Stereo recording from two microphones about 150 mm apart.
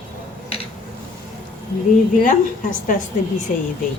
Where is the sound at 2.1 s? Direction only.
60° left (ahead or behind).